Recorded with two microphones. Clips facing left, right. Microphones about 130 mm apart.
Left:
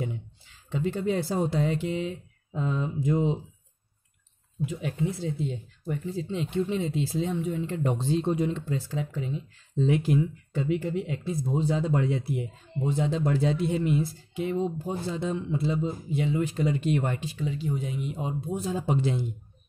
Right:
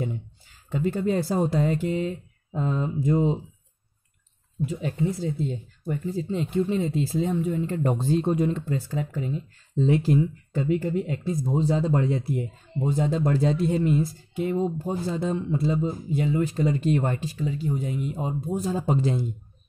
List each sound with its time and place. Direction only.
0.7 s speech: 45° right (ahead or behind)
5.0 s speech: 40° right (ahead or behind)